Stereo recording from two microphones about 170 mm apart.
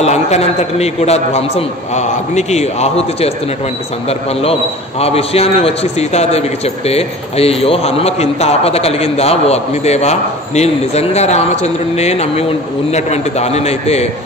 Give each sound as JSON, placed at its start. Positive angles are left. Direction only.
{"t": 0.0, "sound": "a man's voice", "side_deg": 40}